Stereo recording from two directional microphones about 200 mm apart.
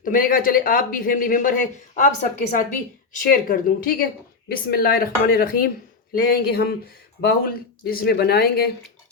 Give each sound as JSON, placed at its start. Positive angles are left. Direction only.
{"t": 0.0, "sound": "speech", "side_deg": 45}
{"t": 3.2, "sound": "speech", "side_deg": 45}